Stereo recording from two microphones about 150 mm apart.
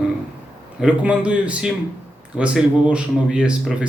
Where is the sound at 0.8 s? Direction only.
5° right (ahead or behind).